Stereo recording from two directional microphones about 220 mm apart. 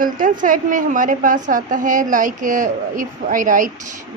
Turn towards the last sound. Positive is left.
turn(degrees=-35)  # may be behind; listen again after turning